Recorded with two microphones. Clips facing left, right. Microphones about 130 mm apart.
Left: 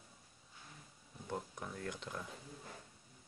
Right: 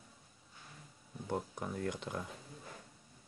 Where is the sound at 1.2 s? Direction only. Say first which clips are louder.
Right 5 dB; 20° right (ahead or behind).